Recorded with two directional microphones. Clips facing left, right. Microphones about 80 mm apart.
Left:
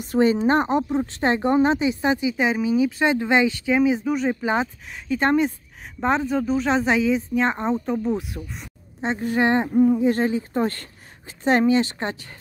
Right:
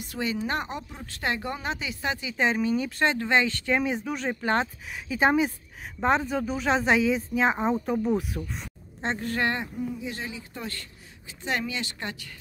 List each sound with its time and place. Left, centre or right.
0.0 s speech: left; by 4.6 s centre
4.9 s speech: centre
9.8 s speech: left